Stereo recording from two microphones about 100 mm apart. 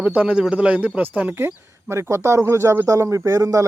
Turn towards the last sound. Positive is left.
turn(degrees=-35)  # may be behind; listen again after turning